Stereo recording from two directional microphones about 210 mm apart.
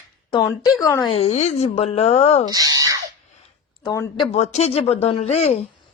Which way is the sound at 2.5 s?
15° right (ahead or behind).